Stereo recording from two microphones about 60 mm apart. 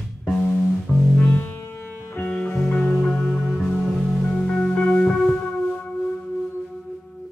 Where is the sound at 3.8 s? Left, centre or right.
Centre.